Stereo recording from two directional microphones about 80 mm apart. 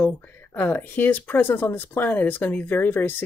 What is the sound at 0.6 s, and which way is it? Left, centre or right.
Speech, left.